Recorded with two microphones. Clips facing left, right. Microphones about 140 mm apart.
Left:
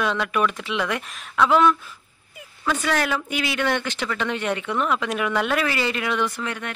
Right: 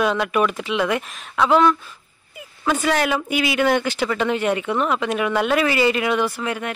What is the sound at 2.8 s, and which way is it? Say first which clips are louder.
Speech: right 3 dB; 10° right (ahead or behind).